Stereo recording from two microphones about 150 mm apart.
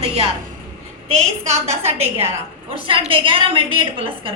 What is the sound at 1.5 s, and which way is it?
A woman's voice, 45° right (ahead or behind).